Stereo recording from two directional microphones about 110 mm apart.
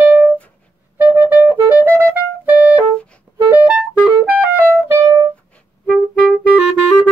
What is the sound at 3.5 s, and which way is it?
Music, 15° right (ahead or behind).